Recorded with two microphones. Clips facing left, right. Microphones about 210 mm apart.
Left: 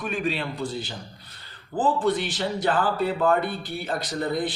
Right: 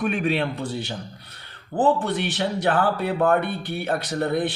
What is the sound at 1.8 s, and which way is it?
A man's voice, 60° right (ahead or behind).